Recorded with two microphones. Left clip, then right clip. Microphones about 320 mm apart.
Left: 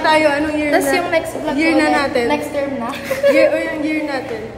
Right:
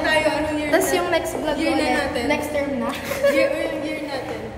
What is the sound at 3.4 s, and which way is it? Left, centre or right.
Speech, left.